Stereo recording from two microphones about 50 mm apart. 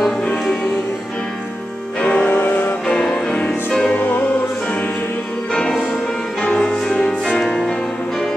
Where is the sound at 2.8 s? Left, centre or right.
Centre.